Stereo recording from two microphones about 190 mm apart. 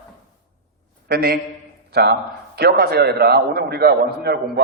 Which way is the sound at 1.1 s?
55° right (ahead or behind).